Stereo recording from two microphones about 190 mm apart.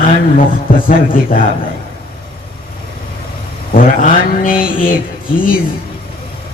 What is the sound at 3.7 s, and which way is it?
Mantra, 45° left (ahead or behind).